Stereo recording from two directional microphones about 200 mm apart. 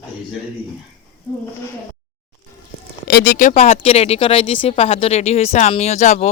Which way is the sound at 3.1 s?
50° left (ahead or behind).